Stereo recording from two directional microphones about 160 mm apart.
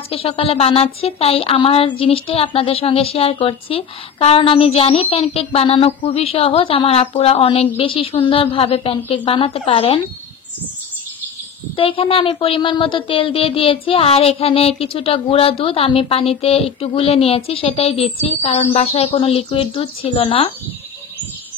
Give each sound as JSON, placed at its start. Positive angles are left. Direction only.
{"t": 0.1, "sound": "speech", "side_deg": 35}
{"t": 11.7, "sound": "speech", "side_deg": 35}